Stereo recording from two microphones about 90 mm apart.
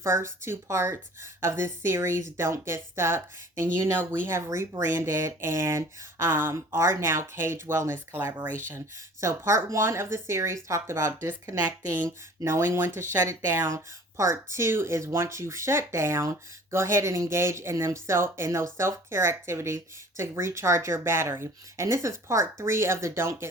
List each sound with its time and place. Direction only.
0.0 s speech: 30° right (ahead or behind)